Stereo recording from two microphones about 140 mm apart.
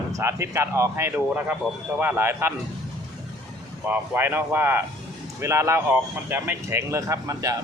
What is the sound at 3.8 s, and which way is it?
Speech, 15° right (ahead or behind).